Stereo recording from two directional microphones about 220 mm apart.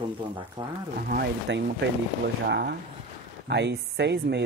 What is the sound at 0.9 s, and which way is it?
Speech, 45° right (ahead or behind).